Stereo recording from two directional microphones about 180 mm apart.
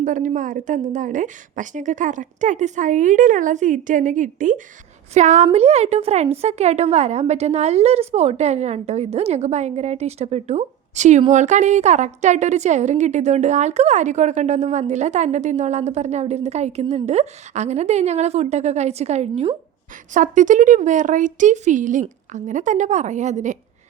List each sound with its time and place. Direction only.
0.0 s a woman's voice: 45° right (ahead or behind)